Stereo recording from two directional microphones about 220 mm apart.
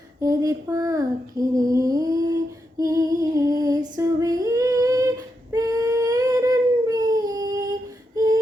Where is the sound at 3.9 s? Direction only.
15° right (ahead or behind).